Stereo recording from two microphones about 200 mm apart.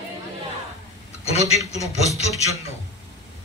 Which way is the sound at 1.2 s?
30° left (ahead or behind).